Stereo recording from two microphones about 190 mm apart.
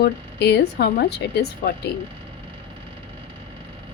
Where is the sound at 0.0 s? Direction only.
65° left (ahead or behind).